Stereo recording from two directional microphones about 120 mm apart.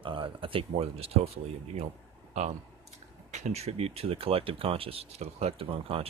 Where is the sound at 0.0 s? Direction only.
45° right (ahead or behind).